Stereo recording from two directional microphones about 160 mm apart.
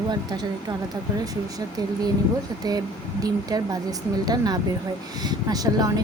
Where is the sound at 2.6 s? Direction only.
25° right (ahead or behind).